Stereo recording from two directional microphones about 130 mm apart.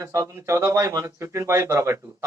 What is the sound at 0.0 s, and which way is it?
Speech, 25° right (ahead or behind).